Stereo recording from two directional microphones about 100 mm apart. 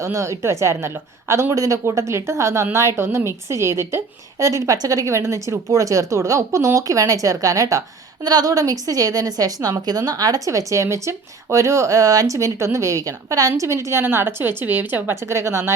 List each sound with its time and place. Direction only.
0.0 s a woman's voice: 30° right (ahead or behind)